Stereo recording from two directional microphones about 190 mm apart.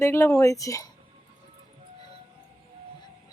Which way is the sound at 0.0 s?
15° left (ahead or behind).